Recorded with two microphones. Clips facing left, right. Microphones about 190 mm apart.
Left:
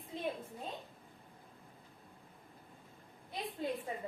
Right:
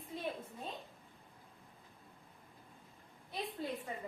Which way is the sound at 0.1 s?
20° left (ahead or behind).